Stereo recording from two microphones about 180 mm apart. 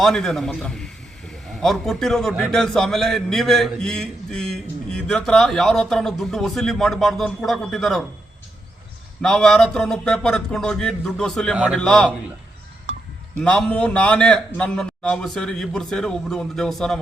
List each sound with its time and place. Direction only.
0.0 s a man's voice: centre (ahead or behind)
9.2 s a man's voice: 5° left (ahead or behind)
12.9 s a sound: 90° right
13.4 s a man's voice: 5° left (ahead or behind)